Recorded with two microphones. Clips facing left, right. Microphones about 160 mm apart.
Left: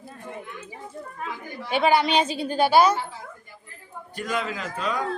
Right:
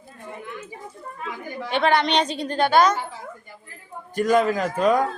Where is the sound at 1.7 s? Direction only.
5° left (ahead or behind).